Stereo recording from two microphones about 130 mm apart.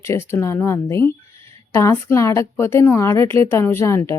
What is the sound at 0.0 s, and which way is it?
A woman's voice, 20° left (ahead or behind).